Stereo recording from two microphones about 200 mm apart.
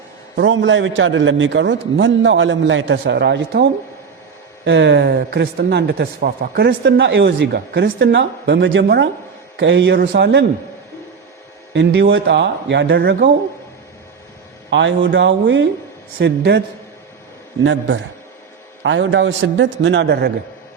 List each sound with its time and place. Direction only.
0.3 s a man's voice: 70° right (ahead or behind)
11.7 s speech: 60° right (ahead or behind)
14.7 s speech: 65° right (ahead or behind)